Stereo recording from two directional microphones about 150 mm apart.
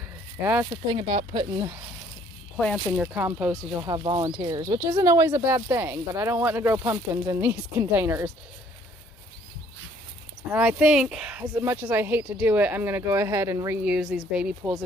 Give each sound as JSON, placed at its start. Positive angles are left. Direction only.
{"t": 0.9, "sound": "speech", "side_deg": -30}
{"t": 2.6, "sound": "speech", "side_deg": 0}
{"t": 3.2, "sound": "speech", "side_deg": -20}
{"t": 3.9, "sound": "speech", "side_deg": -30}
{"t": 10.5, "sound": "speech", "side_deg": -10}
{"t": 13.8, "sound": "speech", "side_deg": -5}